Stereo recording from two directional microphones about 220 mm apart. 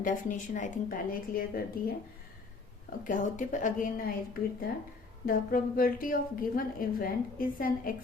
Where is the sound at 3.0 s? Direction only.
35° left (ahead or behind).